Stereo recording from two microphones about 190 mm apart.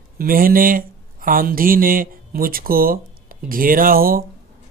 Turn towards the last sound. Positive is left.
turn(degrees=-50)  # may be behind; listen again after turning